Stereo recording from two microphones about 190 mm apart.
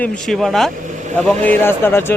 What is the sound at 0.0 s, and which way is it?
A man's voice, centre (ahead or behind).